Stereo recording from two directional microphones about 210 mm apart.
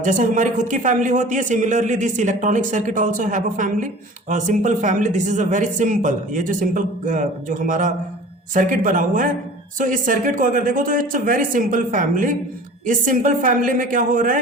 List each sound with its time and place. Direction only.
0.0 s a man's voice: 35° right (ahead or behind)